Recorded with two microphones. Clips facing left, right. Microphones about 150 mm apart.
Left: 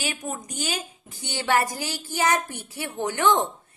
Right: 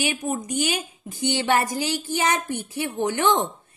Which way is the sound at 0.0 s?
20° right (ahead or behind).